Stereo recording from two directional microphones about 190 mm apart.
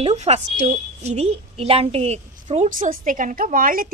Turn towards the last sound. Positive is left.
turn(degrees=-45)  # may be behind; listen again after turning